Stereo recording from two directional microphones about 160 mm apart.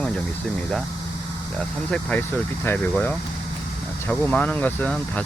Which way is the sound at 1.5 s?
5° left (ahead or behind).